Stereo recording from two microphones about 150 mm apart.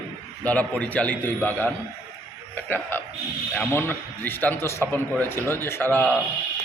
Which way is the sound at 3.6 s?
15° left (ahead or behind).